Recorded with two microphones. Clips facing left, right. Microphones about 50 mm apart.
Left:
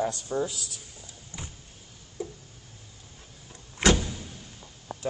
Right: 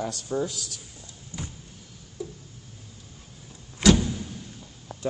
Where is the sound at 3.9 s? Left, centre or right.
Centre.